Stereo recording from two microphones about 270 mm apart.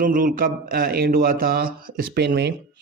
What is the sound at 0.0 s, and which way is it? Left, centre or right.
A man's voice, right.